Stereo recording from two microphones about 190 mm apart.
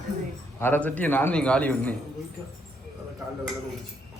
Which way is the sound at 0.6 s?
10° left (ahead or behind).